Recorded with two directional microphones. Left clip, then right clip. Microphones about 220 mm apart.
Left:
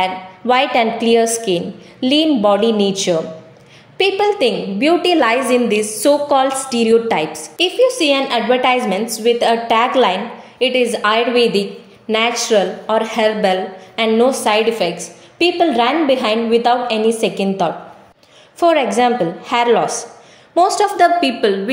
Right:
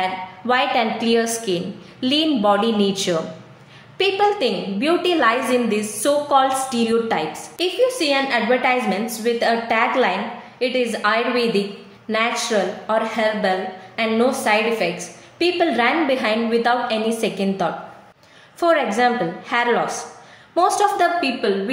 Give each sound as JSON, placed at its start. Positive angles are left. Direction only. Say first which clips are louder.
{"t": 0.0, "sound": "a woman's voice", "louder": "left 5 dB", "side_deg": 25}
{"t": 21.2, "sound": "a woman's voice", "louder": "left 5 dB", "side_deg": 40}